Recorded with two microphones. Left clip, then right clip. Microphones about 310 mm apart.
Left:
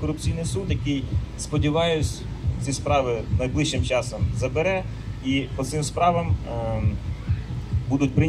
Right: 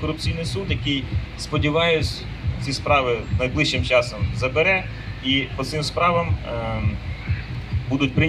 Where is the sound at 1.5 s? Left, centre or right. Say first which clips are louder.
Right 3 dB; centre.